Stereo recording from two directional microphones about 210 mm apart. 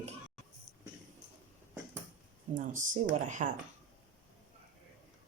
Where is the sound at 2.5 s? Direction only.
40° right (ahead or behind).